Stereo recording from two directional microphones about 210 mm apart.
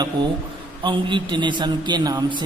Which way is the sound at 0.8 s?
20° right (ahead or behind).